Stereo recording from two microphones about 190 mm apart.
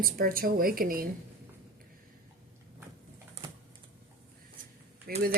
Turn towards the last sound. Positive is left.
turn(degrees=-50)  # may be behind; listen again after turning